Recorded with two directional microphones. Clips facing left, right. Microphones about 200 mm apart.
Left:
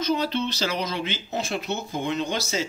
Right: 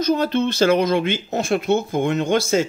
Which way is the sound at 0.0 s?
50° right (ahead or behind).